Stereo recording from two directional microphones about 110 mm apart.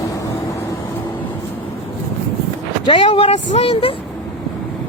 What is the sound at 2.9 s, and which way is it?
Speech, 50° left (ahead or behind).